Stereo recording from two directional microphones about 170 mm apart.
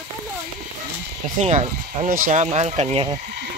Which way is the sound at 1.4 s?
45° right (ahead or behind).